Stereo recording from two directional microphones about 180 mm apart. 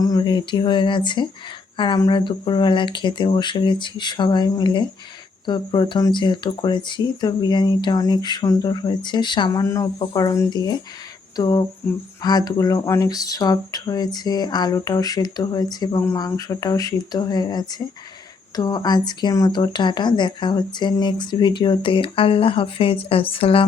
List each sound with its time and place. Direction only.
0.0 s speech: 20° left (ahead or behind)